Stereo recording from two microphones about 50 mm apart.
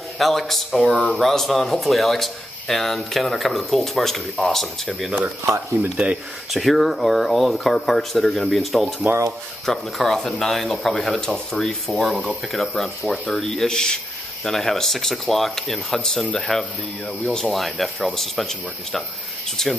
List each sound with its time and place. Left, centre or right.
0.2 s speech: centre
0.9 s speech: left
1.2 s speech: centre
6.5 s speech: centre
9.9 s speech: centre
17.6 s speech: centre